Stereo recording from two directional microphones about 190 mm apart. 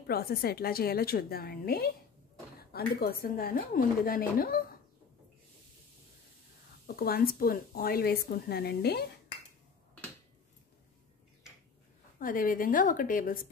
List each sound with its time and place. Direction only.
0.0 s a woman's voice: 55° left (ahead or behind)
7.0 s a woman's voice: 50° left (ahead or behind)
12.2 s a woman's voice: 45° left (ahead or behind)